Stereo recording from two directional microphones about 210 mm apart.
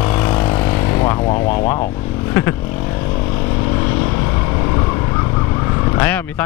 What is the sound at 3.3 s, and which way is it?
Vehicle, 15° left (ahead or behind).